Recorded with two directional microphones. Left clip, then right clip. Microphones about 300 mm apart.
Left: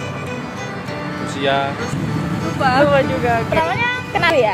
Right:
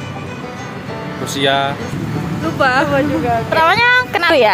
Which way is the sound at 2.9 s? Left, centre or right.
Centre.